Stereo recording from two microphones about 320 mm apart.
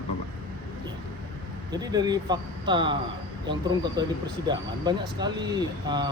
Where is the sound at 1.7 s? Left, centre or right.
Centre.